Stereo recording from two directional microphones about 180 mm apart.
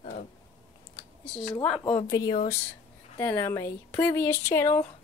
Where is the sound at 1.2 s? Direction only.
Centre (ahead or behind).